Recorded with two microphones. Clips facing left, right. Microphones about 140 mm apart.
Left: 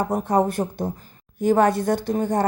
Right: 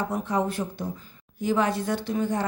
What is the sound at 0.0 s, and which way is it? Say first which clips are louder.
Speech: left 6 dB; 45° left (ahead or behind).